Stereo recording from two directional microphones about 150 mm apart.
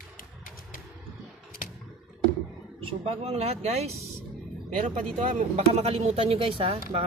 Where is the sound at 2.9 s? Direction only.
40° right (ahead or behind).